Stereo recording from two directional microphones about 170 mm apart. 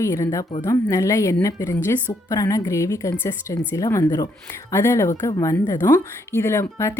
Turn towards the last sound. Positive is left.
turn(degrees=15)  # may be behind; listen again after turning